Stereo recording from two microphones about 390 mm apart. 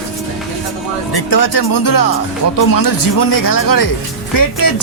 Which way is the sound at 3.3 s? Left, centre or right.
Left.